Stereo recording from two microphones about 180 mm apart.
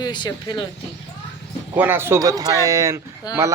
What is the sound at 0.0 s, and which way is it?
Speech, 25° left (ahead or behind).